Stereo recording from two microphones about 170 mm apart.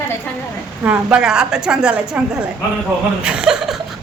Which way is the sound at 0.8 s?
5° right (ahead or behind).